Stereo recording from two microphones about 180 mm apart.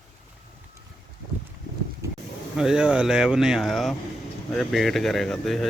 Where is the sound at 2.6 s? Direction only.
5° right (ahead or behind).